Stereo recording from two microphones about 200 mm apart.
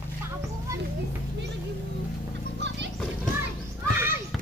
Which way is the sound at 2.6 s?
60° right (ahead or behind).